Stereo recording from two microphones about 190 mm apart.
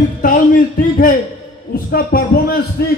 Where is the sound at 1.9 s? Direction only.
50° left (ahead or behind).